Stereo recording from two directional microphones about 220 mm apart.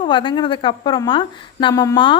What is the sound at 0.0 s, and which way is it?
A woman's voice, 20° left (ahead or behind).